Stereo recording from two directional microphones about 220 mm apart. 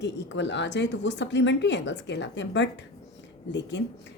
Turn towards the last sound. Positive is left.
turn(degrees=55)  # may be behind; listen again after turning